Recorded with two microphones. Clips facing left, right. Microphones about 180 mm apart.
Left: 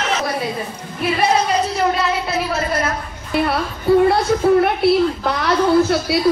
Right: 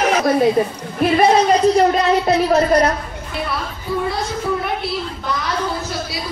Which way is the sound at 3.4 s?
60° left (ahead or behind).